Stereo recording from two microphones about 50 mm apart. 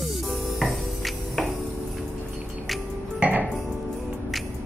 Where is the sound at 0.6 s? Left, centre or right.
Centre.